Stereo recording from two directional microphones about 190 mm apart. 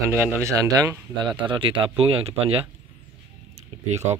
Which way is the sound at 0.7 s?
20° right (ahead or behind).